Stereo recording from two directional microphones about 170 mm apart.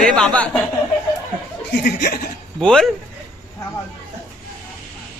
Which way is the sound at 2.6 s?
5° left (ahead or behind).